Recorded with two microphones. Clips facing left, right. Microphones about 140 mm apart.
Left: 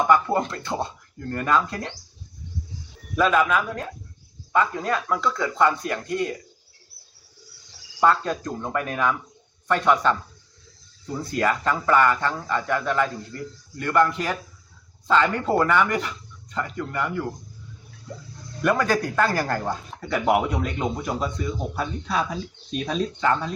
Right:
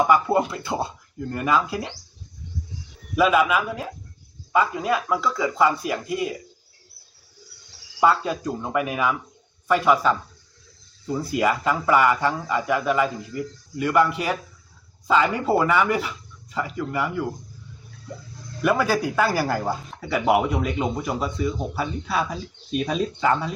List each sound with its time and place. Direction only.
0.1 s speech: 5° right (ahead or behind)
3.2 s speech: 10° right (ahead or behind)
8.0 s speech: 5° right (ahead or behind)
18.6 s speech: 5° right (ahead or behind)